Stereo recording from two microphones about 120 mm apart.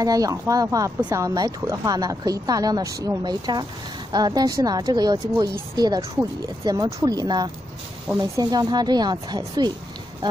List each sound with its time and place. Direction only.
0.0 s speech: 30° right (ahead or behind)